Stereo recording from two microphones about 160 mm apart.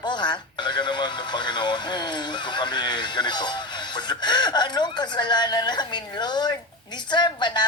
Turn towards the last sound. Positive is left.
turn(degrees=25)  # may be behind; listen again after turning